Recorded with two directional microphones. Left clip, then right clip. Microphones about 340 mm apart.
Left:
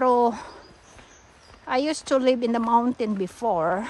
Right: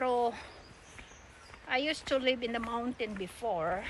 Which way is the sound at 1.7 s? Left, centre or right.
Centre.